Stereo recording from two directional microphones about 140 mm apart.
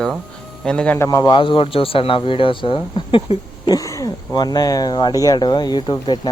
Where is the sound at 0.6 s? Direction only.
5° left (ahead or behind).